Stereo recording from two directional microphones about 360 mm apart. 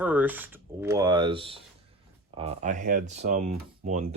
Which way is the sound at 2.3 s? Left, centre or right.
Centre.